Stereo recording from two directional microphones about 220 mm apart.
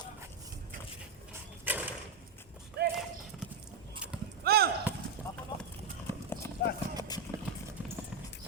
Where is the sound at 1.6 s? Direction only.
5° right (ahead or behind).